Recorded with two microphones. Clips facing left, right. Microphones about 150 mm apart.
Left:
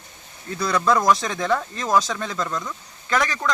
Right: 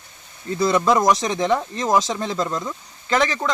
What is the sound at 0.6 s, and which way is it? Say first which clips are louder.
Speech: right 3 dB; 20° right (ahead or behind).